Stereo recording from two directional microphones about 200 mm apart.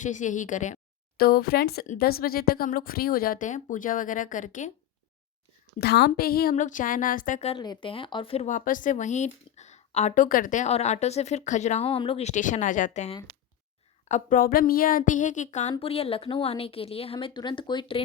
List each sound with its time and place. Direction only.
0.0 s a woman's voice: 40° left (ahead or behind)
5.8 s a woman's voice: 55° left (ahead or behind); by 18.0 s 25° left (ahead or behind)